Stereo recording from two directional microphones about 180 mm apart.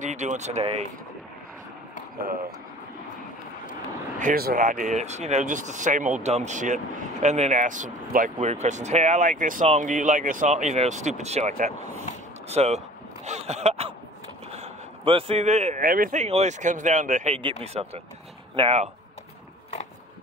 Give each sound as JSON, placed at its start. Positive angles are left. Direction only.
{"t": 0.0, "sound": "speech", "side_deg": -40}
{"t": 4.2, "sound": "speech", "side_deg": -55}
{"t": 17.4, "sound": "speech", "side_deg": -30}